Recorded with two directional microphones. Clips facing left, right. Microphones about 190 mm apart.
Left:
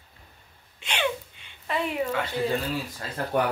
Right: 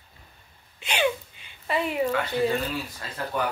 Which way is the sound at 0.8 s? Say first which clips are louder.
Right 3 dB; 5° right (ahead or behind).